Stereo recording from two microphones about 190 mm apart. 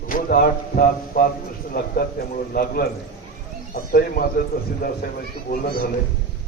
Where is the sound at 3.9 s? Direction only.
50° left (ahead or behind).